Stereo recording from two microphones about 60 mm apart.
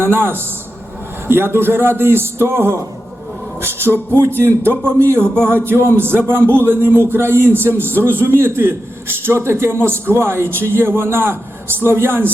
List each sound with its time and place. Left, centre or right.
0.0 s a man's voice: right
5.2 s music: centre
5.5 s a man's voice: right